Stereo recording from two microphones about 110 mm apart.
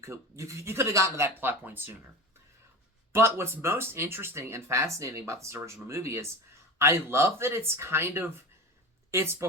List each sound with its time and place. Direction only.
0.0 s speech: 25° right (ahead or behind)
3.1 s speech: 20° right (ahead or behind)